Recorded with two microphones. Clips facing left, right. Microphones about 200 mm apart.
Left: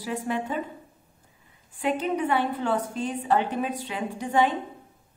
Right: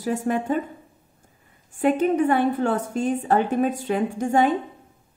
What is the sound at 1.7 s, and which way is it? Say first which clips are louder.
A woman's voice: right 7 dB; 50° right (ahead or behind).